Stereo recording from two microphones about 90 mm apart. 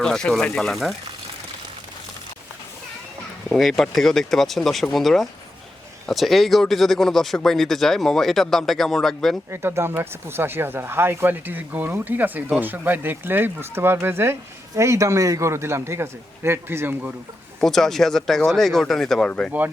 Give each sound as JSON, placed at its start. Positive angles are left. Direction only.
{"t": 0.0, "sound": "speech", "side_deg": 10}
{"t": 3.5, "sound": "speech", "side_deg": 0}
{"t": 9.5, "sound": "a man's voice", "side_deg": -30}
{"t": 17.6, "sound": "speech", "side_deg": 5}